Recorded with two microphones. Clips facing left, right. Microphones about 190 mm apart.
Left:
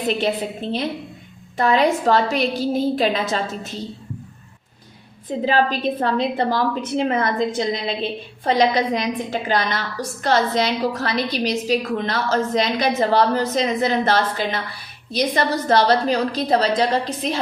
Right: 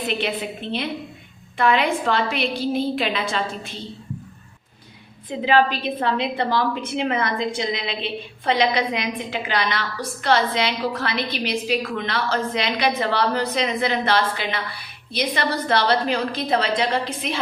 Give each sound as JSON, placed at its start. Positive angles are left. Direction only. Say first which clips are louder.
{"t": 0.2, "sound": "a woman's voice", "louder": "left 4 dB", "side_deg": 40}
{"t": 5.5, "sound": "a woman's voice", "louder": "right 1 dB", "side_deg": 45}